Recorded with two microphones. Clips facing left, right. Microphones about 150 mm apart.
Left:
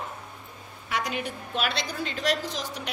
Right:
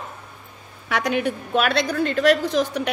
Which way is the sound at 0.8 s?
75° right (ahead or behind).